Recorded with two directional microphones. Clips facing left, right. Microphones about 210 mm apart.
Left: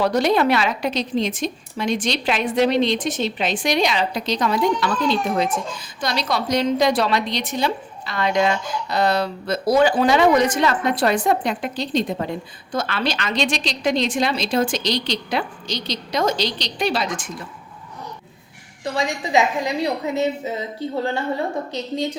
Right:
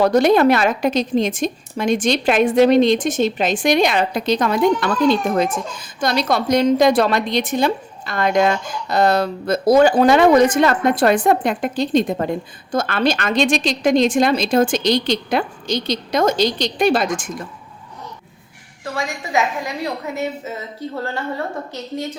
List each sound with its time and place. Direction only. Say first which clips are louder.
0.0 s a woman's voice: right 5 dB; 50° right (ahead or behind)
18.9 s a woman's voice: left 2 dB; 20° left (ahead or behind)